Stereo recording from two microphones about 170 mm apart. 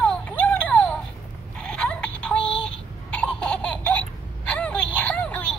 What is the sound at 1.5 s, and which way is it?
Synthetic singing, 5° left (ahead or behind).